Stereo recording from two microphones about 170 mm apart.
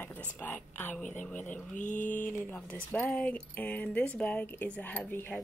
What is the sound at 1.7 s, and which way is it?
Speech, 50° left (ahead or behind).